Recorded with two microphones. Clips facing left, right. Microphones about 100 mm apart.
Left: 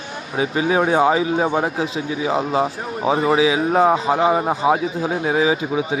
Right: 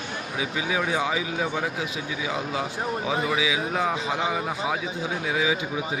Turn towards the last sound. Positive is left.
turn(degrees=40)  # may be behind; listen again after turning